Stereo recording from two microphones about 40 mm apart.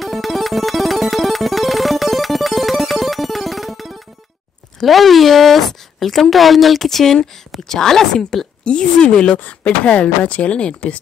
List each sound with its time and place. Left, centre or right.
0.0 s music: centre
4.8 s a woman's voice: centre
8.6 s speech: left
9.1 s a woman's voice: centre
9.8 s speech: left